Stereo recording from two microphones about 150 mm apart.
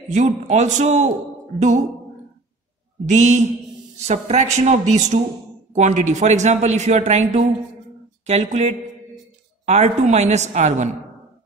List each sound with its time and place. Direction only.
0.1 s a man's voice: 50° right (ahead or behind)
3.1 s a man's voice: 50° right (ahead or behind)